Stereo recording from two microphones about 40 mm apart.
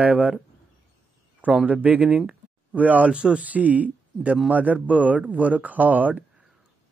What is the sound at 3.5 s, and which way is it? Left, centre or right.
Speech, right.